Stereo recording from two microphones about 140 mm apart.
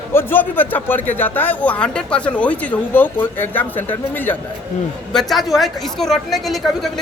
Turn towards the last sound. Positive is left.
turn(degrees=0)  # may be behind; listen again after turning